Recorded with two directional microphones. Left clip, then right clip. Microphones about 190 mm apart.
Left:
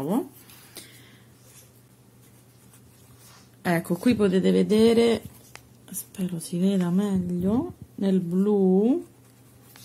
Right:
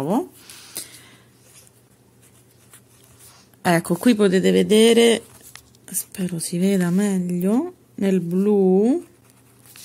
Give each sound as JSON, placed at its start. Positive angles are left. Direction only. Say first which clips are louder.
{"t": 3.6, "sound": "speech", "louder": "right 6 dB", "side_deg": -35}